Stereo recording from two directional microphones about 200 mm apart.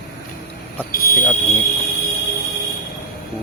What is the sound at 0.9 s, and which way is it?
Speech, 45° left (ahead or behind).